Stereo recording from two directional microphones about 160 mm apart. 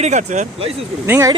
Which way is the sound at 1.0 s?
15° right (ahead or behind).